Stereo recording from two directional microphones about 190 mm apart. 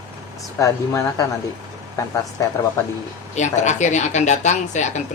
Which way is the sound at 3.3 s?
40° left (ahead or behind).